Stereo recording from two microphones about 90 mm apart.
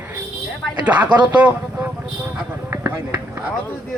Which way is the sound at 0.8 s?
15° right (ahead or behind).